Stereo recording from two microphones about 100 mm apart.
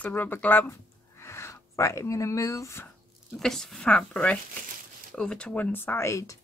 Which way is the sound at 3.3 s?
5° left (ahead or behind).